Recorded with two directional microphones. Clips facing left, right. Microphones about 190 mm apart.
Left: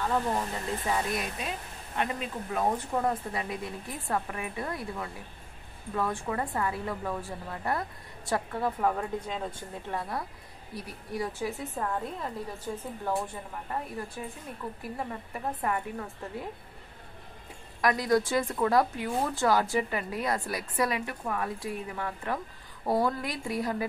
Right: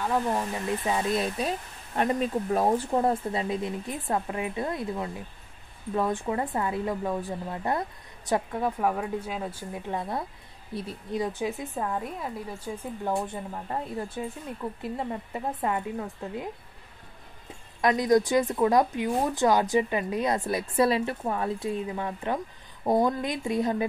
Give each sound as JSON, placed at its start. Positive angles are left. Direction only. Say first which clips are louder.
{"t": 0.7, "sound": "speech", "louder": "right 4 dB", "side_deg": -20}
{"t": 2.0, "sound": "a woman's voice", "louder": "right 7 dB", "side_deg": -40}
{"t": 17.8, "sound": "speech", "louder": "right 4 dB", "side_deg": -20}